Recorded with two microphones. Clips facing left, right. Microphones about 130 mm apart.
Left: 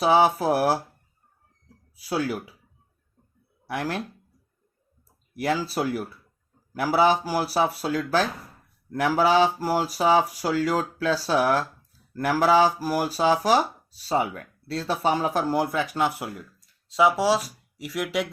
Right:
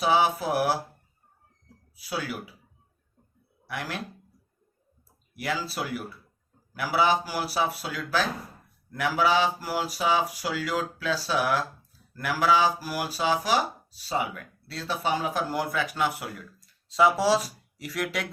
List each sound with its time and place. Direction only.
0.0 s speech: 40° left (ahead or behind)
2.0 s speech: 40° left (ahead or behind)
3.7 s speech: 35° left (ahead or behind)
5.4 s speech: 40° left (ahead or behind)
16.9 s speech: 10° left (ahead or behind)